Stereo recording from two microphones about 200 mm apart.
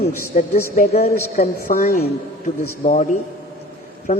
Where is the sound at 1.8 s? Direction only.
35° left (ahead or behind).